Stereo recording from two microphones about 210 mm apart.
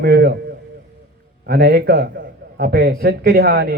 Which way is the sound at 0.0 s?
50° right (ahead or behind).